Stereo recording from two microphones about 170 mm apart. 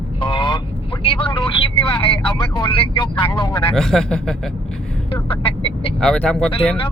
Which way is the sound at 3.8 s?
5° left (ahead or behind).